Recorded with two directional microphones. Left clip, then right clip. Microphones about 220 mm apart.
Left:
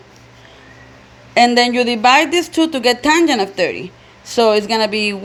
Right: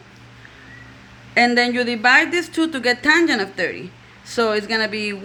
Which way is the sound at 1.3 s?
20° left (ahead or behind).